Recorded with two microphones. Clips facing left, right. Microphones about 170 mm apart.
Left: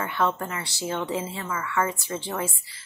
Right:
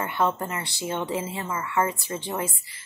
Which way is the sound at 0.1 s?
15° right (ahead or behind).